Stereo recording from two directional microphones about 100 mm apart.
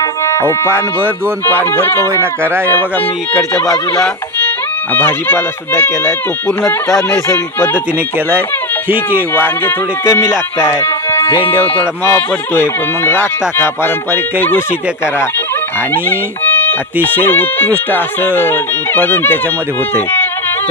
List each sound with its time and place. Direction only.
0.0 s music: 30° left (ahead or behind)
1.5 s speech: 20° left (ahead or behind)
3.5 s speech: 30° left (ahead or behind)
4.9 s speech: 20° left (ahead or behind)
9.3 s speech: 20° left (ahead or behind)
11.8 s speech: 20° left (ahead or behind)
16.0 s speech: 20° left (ahead or behind)